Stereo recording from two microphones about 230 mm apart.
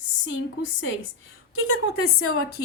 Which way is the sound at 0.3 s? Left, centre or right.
Left.